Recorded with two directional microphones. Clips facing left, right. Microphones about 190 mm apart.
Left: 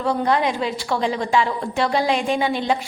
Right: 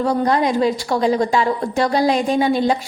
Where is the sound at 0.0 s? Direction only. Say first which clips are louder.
Right 3 dB; 40° right (ahead or behind).